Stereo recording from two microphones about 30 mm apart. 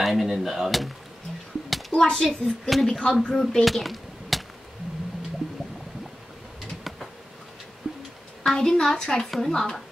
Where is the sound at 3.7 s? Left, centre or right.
Centre.